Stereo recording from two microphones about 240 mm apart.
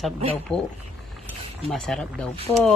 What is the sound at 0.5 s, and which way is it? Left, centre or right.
A woman's voice, centre.